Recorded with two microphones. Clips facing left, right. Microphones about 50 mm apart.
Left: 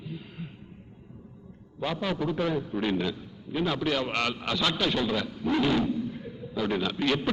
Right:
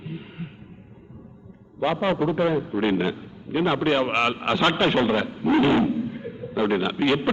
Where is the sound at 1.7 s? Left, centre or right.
Right.